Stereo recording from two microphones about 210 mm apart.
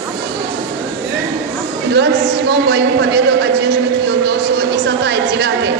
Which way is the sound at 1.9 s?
50° right (ahead or behind).